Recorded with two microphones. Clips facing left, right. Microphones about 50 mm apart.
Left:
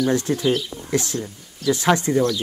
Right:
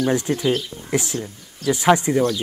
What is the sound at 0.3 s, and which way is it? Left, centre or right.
Speech, right.